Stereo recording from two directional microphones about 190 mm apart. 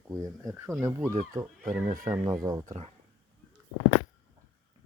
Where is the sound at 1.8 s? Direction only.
40° right (ahead or behind).